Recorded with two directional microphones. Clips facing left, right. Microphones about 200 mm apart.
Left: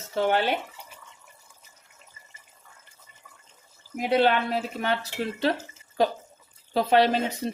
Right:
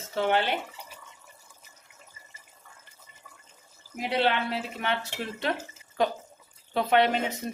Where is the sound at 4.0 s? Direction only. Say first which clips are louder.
Left 5 dB; 45° left (ahead or behind).